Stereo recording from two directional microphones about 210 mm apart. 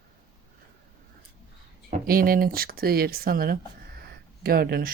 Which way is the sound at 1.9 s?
45° right (ahead or behind).